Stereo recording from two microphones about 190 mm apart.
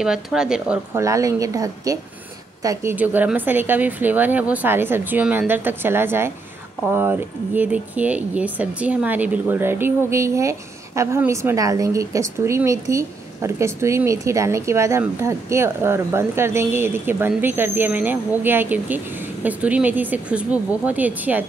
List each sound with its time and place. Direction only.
0.0 s a woman's voice: 5° right (ahead or behind)
0.9 s a woman's voice: 15° right (ahead or behind)